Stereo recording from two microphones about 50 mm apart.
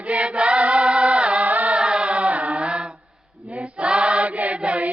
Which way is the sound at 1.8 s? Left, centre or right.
Centre.